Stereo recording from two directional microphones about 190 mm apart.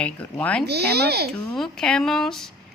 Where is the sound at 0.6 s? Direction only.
60° right (ahead or behind).